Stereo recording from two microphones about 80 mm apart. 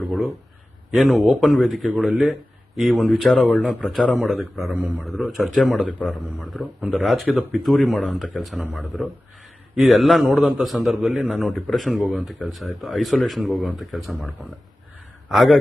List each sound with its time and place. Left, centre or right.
0.9 s speech: centre
4.7 s a man's voice: centre
5.0 s speech: centre
9.7 s speech: centre
15.3 s speech: centre